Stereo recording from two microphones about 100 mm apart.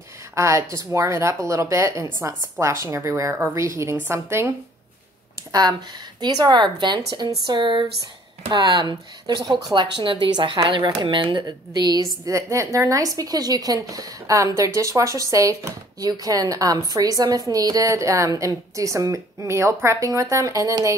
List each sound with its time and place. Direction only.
0.4 s a woman's voice: 30° right (ahead or behind)
5.5 s a woman's voice: 40° right (ahead or behind)
11.4 s a woman's voice: 40° right (ahead or behind)